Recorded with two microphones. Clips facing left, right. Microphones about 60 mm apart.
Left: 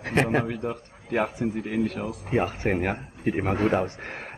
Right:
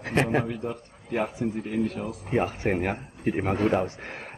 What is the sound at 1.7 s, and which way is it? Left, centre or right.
Speech, left.